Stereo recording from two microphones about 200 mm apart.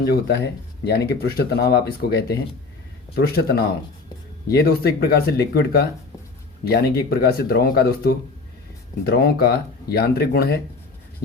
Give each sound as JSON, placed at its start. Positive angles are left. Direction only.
{"t": 0.0, "sound": "speech", "side_deg": 55}